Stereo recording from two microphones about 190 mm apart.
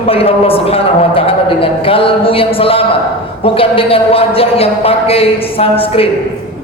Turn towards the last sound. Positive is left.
turn(degrees=30)  # may be behind; listen again after turning